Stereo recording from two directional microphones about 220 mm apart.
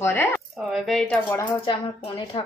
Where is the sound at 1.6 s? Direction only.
25° left (ahead or behind).